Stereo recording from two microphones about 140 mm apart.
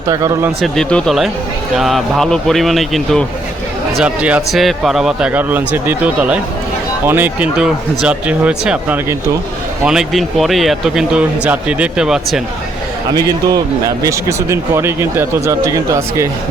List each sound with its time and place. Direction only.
0.1 s speech: 20° right (ahead or behind)
0.6 s a man's voice: 5° left (ahead or behind)
13.1 s speech: 25° right (ahead or behind)